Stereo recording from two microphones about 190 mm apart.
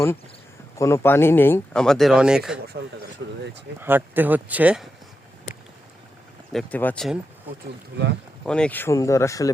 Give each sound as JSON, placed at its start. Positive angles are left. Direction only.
{"t": 0.8, "sound": "speech", "side_deg": 15}
{"t": 2.8, "sound": "speech", "side_deg": -60}
{"t": 3.8, "sound": "speech", "side_deg": -10}
{"t": 6.5, "sound": "speech", "side_deg": 5}
{"t": 8.4, "sound": "speech", "side_deg": 5}